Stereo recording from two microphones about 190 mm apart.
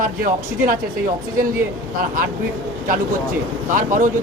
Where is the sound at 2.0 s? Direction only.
50° right (ahead or behind).